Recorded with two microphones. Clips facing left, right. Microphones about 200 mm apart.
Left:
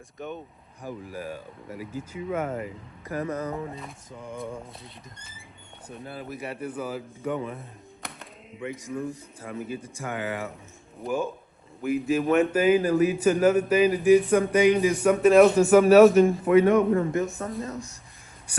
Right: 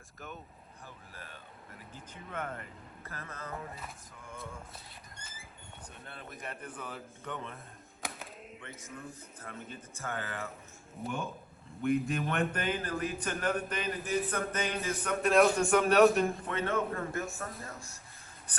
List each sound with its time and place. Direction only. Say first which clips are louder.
0.2 s a man's voice: left 11 dB; centre (ahead or behind)
1.7 s a man's voice: left 16 dB; 10° left (ahead or behind)
5.9 s a man's voice: left 13 dB; 5° left (ahead or behind)
8.0 s a sound: even; centre (ahead or behind)
8.6 s a man's voice: left 16 dB; 15° left (ahead or behind)
11.0 s a man's voice: left 9 dB; 5° left (ahead or behind)
16.6 s a man's voice: left 14 dB; 15° left (ahead or behind)